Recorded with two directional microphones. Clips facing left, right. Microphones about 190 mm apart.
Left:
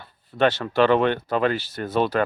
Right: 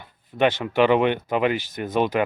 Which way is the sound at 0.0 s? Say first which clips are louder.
Even; 15° right (ahead or behind).